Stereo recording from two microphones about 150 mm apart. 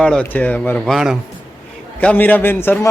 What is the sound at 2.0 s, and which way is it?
Speech, 10° left (ahead or behind).